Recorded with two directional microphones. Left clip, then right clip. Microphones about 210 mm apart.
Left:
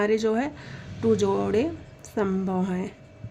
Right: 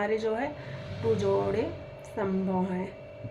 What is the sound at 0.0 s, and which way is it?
Speech, 45° left (ahead or behind).